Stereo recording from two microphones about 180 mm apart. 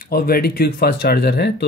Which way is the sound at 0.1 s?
60° left (ahead or behind).